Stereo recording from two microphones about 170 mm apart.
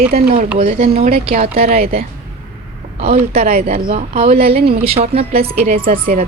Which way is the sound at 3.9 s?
40° right (ahead or behind).